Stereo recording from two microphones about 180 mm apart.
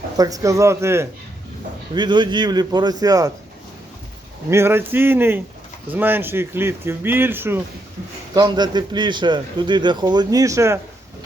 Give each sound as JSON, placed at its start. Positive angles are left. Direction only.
{"t": 0.2, "sound": "speech", "side_deg": -20}
{"t": 2.0, "sound": "a man's voice", "side_deg": -25}
{"t": 4.4, "sound": "speech", "side_deg": -15}
{"t": 8.4, "sound": "a man's voice", "side_deg": -25}